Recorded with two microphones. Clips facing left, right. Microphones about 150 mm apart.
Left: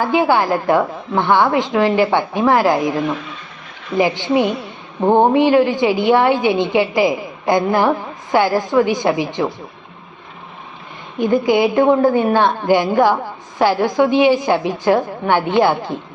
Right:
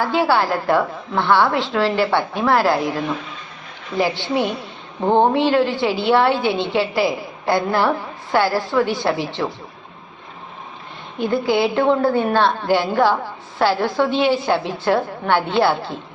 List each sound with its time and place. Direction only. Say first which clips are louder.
0.0 s a woman's voice: left 3 dB; 15° left (ahead or behind)
11.2 s a woman's voice: left 4 dB; 15° left (ahead or behind)